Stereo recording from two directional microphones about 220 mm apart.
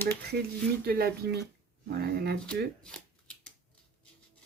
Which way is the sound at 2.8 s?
5° left (ahead or behind).